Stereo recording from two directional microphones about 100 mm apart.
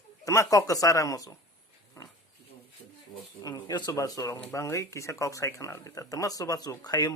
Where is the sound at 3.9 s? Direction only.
35° left (ahead or behind).